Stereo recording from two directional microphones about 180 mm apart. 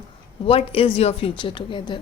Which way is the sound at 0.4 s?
30° left (ahead or behind).